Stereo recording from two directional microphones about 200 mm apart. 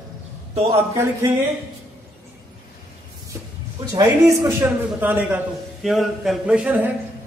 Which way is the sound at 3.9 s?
15° right (ahead or behind).